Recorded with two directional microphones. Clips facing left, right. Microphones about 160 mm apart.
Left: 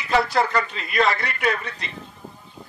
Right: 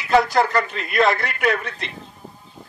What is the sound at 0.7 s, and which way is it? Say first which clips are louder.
Speech: right 3 dB; 50° right (ahead or behind).